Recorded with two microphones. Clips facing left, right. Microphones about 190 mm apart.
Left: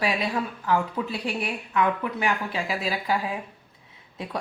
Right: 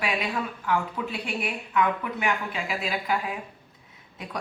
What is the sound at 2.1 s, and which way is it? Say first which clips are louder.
A woman's voice: left 2 dB; 35° left (ahead or behind).